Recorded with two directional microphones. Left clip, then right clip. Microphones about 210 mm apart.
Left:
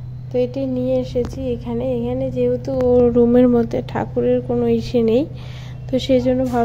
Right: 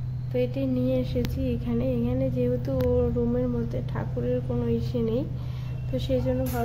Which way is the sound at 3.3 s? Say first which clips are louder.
Left 14 dB; 40° left (ahead or behind).